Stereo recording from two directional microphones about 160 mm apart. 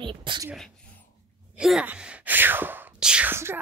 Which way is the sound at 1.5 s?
5° right (ahead or behind).